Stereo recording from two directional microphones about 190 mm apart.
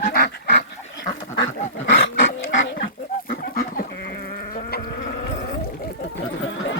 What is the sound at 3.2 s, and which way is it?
Goat, 50° left (ahead or behind).